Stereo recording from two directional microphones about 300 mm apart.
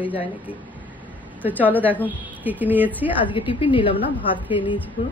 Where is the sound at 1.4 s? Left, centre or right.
Centre.